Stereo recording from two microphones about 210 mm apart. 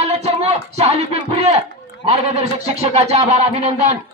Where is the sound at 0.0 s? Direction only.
30° right (ahead or behind).